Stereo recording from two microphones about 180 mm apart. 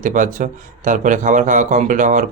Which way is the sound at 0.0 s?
45° right (ahead or behind).